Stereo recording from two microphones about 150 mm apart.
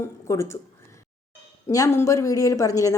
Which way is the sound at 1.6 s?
20° left (ahead or behind).